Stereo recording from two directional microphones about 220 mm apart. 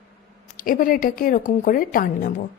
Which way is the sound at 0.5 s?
40° left (ahead or behind).